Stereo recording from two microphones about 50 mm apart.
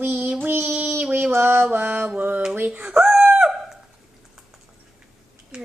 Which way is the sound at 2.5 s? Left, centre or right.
Right.